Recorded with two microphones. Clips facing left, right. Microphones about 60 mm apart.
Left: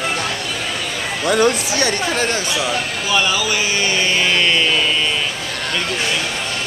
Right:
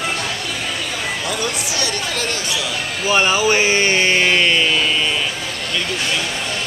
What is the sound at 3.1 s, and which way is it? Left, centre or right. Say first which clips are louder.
Speech: right 3 dB; right.